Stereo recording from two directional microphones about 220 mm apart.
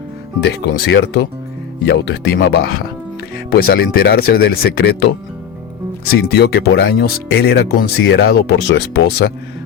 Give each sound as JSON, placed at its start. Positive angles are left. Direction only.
{"t": 0.4, "sound": "speech", "side_deg": 50}